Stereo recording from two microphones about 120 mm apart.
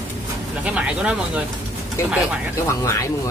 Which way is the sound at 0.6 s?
10° right (ahead or behind).